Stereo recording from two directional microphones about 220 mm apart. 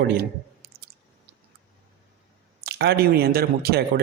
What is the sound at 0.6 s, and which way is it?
Chewing, 45° right (ahead or behind).